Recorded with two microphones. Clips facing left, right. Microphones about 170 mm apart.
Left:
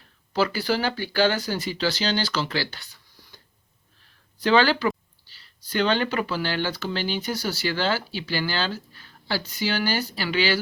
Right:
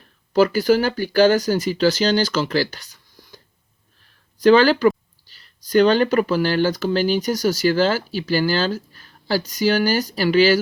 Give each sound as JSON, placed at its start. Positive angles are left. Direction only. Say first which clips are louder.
{"t": 0.3, "sound": "speech", "louder": "right 8 dB", "side_deg": -45}